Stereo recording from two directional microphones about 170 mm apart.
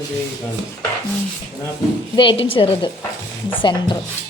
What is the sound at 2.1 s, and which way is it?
A woman's voice, 30° left (ahead or behind).